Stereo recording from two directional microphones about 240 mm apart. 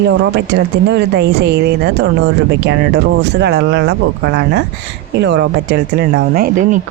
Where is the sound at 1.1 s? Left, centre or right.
Right.